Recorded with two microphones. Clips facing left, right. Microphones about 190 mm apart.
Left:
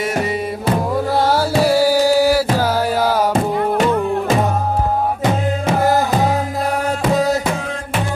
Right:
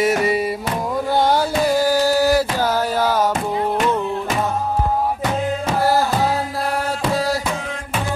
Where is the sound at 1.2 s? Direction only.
5° left (ahead or behind).